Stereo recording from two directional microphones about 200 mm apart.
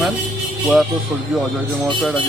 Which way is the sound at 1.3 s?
5° right (ahead or behind).